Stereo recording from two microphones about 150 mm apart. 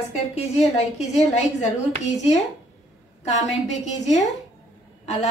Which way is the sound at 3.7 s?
50° left (ahead or behind).